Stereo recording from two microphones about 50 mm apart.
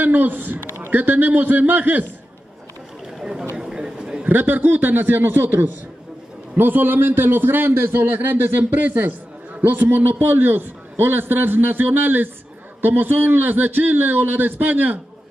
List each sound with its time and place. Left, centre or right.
0.0 s a man's voice: right
0.7 s a man's voice: right
3.2 s chatter: centre
3.5 s a sound: centre
4.3 s a man's voice: right